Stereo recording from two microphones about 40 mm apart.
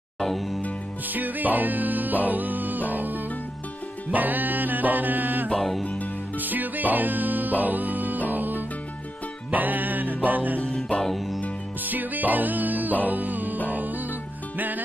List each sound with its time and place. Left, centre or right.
0.2 s music: centre
1.1 s music: right
5.6 s music: centre
6.4 s music: right
10.6 s music: left
11.0 s music: centre
11.8 s music: right